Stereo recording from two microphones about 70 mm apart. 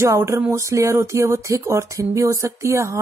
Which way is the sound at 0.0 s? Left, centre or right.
Right.